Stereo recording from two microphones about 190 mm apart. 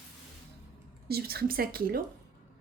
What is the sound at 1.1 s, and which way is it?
Speech, 55° right (ahead or behind).